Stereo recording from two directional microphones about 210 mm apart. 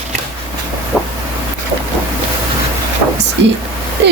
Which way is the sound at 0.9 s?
Centre (ahead or behind).